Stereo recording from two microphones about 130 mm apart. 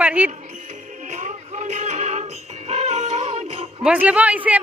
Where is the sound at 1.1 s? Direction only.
60° right (ahead or behind).